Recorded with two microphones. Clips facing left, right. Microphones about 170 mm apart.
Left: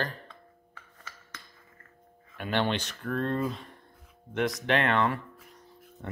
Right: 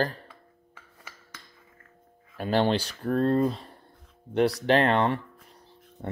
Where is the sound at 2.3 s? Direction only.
35° right (ahead or behind).